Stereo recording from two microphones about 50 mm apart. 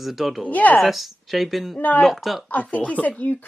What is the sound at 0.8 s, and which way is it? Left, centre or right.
Speech, centre.